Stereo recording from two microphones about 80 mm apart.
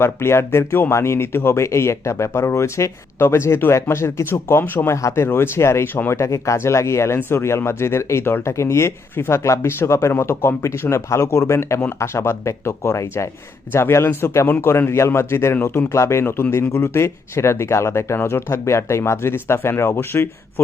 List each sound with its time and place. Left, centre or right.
0.0 s speech: left
4.9 s speech: left